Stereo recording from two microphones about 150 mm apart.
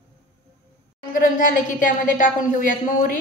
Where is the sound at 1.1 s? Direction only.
65° left (ahead or behind).